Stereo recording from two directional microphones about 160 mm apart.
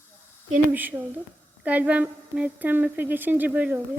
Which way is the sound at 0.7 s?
10° right (ahead or behind).